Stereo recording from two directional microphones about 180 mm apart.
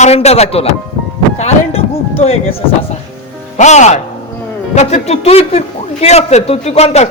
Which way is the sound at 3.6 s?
40° left (ahead or behind).